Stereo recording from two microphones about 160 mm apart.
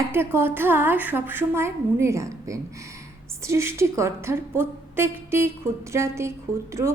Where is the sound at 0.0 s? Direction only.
15° right (ahead or behind).